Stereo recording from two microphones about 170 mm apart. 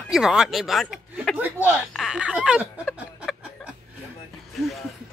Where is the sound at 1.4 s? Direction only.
10° right (ahead or behind).